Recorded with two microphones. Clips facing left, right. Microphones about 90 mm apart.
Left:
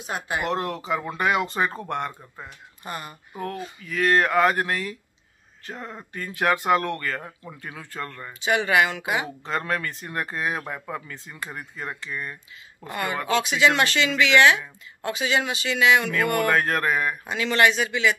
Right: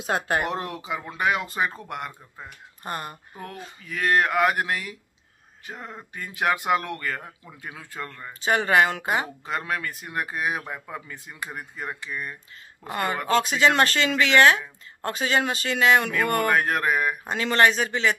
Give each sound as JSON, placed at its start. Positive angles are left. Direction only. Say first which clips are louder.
{"t": 0.5, "sound": "speech", "louder": "left 4 dB", "side_deg": -5}
{"t": 2.8, "sound": "speech", "louder": "right 2 dB", "side_deg": -45}
{"t": 3.8, "sound": "speech", "louder": "left 1 dB", "side_deg": -20}
{"t": 8.3, "sound": "speech", "louder": "right 1 dB", "side_deg": -40}
{"t": 9.4, "sound": "speech", "louder": "left 2 dB", "side_deg": -10}
{"t": 12.9, "sound": "speech", "louder": "right 1 dB", "side_deg": -40}
{"t": 16.4, "sound": "speech", "louder": "even", "side_deg": -15}
{"t": 17.3, "sound": "speech", "louder": "even", "side_deg": -40}